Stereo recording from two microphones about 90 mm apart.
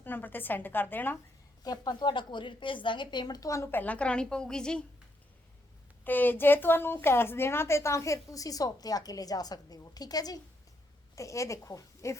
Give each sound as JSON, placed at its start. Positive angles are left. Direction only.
{"t": 0.0, "sound": "a woman's voice", "side_deg": 20}
{"t": 1.6, "sound": "a woman's voice", "side_deg": 45}
{"t": 3.7, "sound": "a woman's voice", "side_deg": 20}
{"t": 6.1, "sound": "a woman's voice", "side_deg": 20}